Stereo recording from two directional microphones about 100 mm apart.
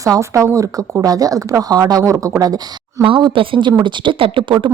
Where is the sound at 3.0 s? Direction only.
60° right (ahead or behind).